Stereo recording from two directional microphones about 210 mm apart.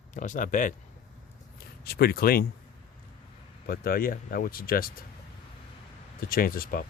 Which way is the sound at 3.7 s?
45° left (ahead or behind).